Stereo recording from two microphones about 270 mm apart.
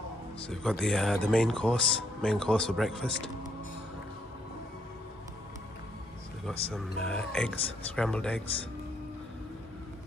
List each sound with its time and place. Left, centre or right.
0.5 s speech: centre
6.7 s speech: centre